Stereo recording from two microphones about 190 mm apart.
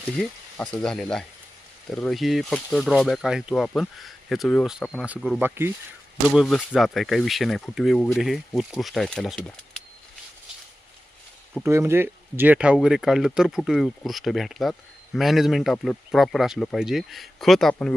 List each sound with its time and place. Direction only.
0.2 s speech: 5° left (ahead or behind)
5.4 s speech: 10° right (ahead or behind)
6.2 s speech: centre (ahead or behind)
11.6 s speech: 15° right (ahead or behind); by 17.9 s 5° left (ahead or behind)